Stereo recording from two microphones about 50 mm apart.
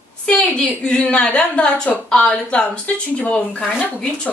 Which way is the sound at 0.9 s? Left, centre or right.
Centre.